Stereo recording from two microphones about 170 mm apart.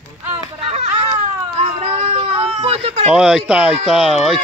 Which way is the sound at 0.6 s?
40° right (ahead or behind).